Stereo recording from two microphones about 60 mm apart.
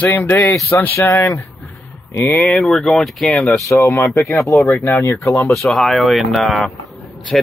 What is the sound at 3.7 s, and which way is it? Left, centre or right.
Speech, left.